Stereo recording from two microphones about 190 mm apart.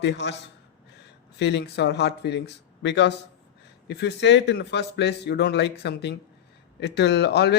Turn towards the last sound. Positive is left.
turn(degrees=60)  # may be behind; listen again after turning